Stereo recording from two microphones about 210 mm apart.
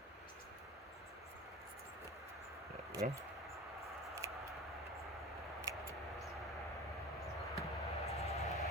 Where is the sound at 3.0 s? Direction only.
35° right (ahead or behind).